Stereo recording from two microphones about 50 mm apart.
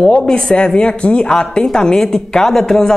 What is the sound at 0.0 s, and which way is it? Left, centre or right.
Speech, centre.